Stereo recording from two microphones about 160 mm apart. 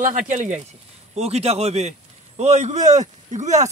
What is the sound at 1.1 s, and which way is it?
A man's voice, 40° right (ahead or behind).